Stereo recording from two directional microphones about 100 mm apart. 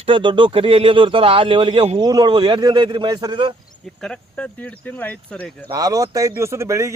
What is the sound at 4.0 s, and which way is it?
Speech, 10° left (ahead or behind).